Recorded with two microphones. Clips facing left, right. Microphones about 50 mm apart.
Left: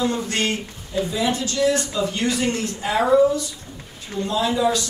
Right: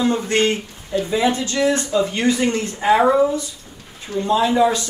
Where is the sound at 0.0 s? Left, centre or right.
Right.